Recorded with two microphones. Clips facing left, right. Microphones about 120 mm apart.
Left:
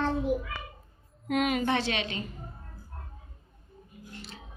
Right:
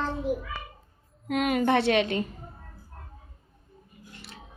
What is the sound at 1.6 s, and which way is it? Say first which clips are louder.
Speech: right 6 dB; 55° right (ahead or behind).